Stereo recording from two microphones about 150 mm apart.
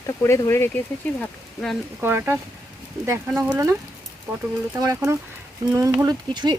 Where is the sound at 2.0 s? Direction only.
15° right (ahead or behind).